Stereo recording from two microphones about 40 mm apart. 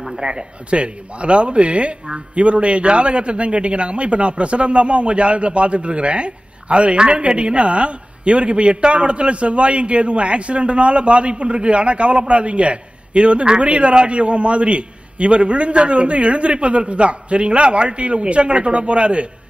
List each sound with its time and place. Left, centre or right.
0.2 s speech: right